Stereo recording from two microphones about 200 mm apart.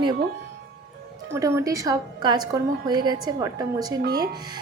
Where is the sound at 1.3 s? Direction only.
15° right (ahead or behind).